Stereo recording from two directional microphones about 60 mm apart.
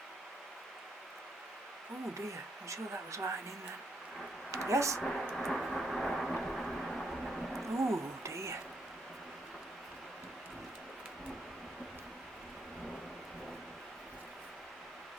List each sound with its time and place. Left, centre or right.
2.6 s speech: right
4.5 s speech: right
4.9 s speech: centre
5.3 s vehicle: centre
7.8 s a sound: right